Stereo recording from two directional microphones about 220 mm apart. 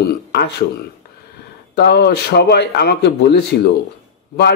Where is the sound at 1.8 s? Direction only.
50° left (ahead or behind).